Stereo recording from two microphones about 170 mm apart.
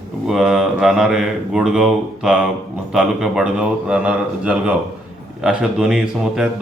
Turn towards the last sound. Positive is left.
turn(degrees=-5)  # may be behind; listen again after turning